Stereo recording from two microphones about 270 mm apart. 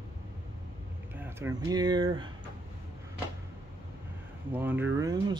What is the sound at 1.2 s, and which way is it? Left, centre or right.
Speech, centre.